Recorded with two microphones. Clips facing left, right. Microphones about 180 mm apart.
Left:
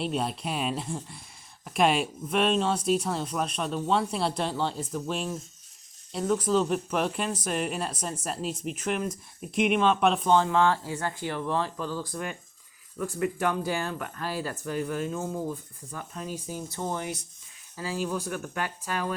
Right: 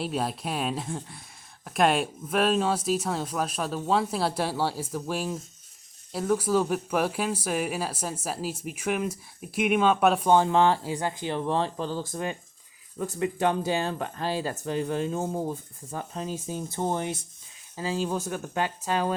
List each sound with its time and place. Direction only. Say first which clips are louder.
0.0 s speech: even; centre (ahead or behind); by 19.1 s 25° right (ahead or behind)